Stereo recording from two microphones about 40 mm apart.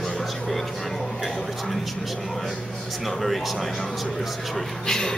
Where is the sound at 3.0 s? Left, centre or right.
Centre.